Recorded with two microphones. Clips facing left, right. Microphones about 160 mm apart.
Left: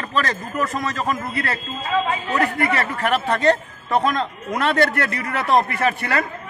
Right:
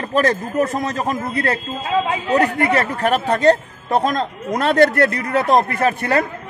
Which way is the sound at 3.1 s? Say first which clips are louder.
Right 4 dB; 40° right (ahead or behind).